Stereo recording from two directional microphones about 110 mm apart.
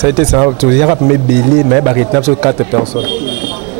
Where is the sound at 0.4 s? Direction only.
20° right (ahead or behind).